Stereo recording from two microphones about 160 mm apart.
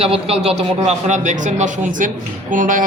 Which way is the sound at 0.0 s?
40° right (ahead or behind).